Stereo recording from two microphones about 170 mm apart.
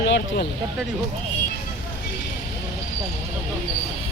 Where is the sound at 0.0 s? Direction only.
90° left.